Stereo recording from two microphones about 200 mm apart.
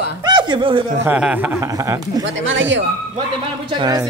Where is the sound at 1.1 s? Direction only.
10° right (ahead or behind).